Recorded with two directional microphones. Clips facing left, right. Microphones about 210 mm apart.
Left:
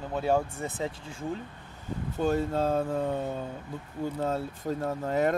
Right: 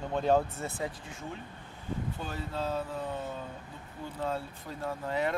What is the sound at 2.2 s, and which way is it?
Speech, 45° left (ahead or behind).